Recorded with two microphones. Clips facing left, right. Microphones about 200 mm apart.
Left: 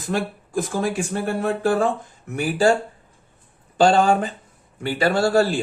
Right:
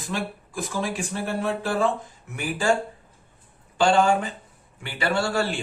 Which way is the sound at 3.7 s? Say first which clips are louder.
Left 3 dB; 40° left (ahead or behind).